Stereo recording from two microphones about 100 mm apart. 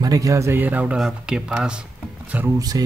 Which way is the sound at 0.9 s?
5° right (ahead or behind).